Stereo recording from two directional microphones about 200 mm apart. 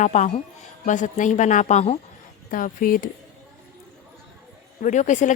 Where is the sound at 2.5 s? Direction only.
45° left (ahead or behind).